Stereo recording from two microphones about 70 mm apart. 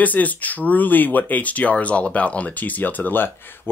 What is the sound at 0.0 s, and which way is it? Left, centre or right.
Speech, left.